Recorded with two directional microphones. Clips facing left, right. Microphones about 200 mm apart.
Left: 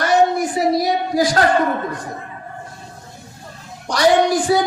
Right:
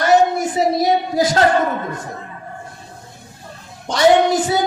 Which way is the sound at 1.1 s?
25° right (ahead or behind).